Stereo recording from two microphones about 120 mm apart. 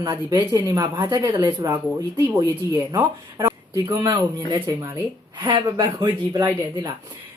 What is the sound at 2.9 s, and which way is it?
Speech, 30° right (ahead or behind).